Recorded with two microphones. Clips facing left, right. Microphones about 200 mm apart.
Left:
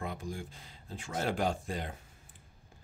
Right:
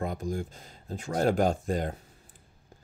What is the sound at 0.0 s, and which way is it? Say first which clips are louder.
Speech: right 7 dB; 45° right (ahead or behind).